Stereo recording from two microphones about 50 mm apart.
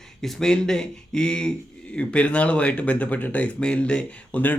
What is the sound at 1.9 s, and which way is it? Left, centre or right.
Speech, left.